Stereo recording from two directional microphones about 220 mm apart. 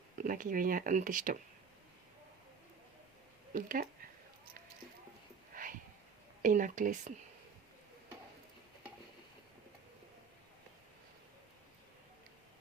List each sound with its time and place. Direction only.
0.2 s speech: 35° right (ahead or behind)
3.5 s speech: 40° right (ahead or behind)
5.5 s a sound: 40° right (ahead or behind)
6.4 s speech: 35° right (ahead or behind)